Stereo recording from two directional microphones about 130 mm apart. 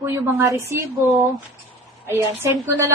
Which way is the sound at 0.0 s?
20° right (ahead or behind).